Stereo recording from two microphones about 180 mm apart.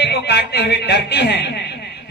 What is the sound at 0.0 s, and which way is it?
A man's voice, 65° left (ahead or behind).